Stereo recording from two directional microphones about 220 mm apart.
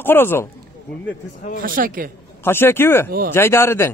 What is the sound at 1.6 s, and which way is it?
Speech, 40° right (ahead or behind).